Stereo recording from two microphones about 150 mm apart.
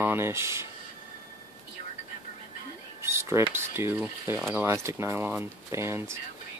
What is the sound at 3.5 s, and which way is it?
Speech, 15° right (ahead or behind).